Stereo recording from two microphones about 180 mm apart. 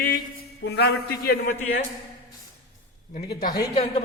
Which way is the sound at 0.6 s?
65° left (ahead or behind).